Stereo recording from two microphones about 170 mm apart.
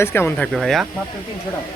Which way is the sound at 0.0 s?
15° left (ahead or behind).